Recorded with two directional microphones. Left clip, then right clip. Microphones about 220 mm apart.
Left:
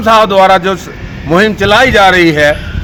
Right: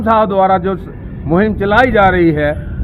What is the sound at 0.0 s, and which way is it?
A man's voice, 15° left (ahead or behind).